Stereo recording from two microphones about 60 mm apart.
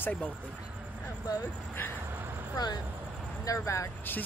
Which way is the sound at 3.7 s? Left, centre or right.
Left.